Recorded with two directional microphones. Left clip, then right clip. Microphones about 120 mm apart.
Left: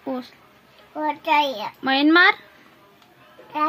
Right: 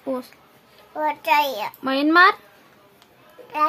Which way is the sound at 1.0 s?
45° right (ahead or behind).